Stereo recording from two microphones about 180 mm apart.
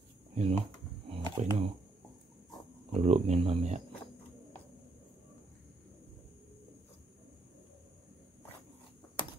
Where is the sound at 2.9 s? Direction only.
35° right (ahead or behind).